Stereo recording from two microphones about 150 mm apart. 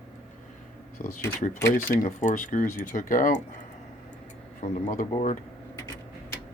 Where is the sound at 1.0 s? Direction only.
60° left (ahead or behind).